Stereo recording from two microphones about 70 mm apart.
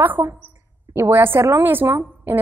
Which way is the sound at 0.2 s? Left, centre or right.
Right.